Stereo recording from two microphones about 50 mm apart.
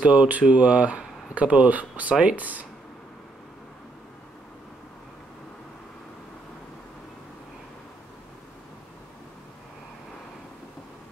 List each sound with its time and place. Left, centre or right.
0.0 s speech: right